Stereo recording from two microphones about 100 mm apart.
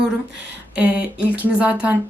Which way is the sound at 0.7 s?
10° right (ahead or behind).